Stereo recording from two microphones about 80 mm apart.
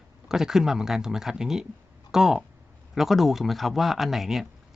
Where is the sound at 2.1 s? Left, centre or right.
Centre.